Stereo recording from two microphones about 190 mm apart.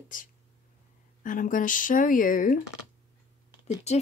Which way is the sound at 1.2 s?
45° left (ahead or behind).